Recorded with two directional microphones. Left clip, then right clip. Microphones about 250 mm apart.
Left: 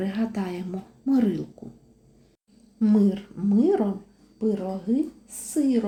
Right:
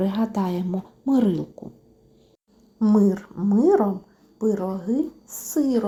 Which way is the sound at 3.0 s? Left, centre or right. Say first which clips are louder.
Right 3 dB; centre.